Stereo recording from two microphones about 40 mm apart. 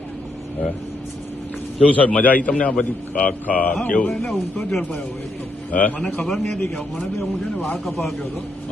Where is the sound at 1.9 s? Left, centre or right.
Left.